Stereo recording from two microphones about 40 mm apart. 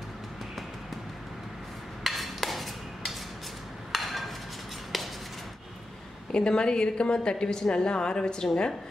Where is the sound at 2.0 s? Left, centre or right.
Centre.